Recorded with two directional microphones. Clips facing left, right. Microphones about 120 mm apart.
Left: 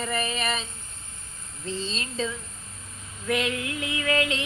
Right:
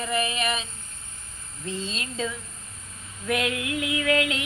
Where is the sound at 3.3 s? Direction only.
30° left (ahead or behind).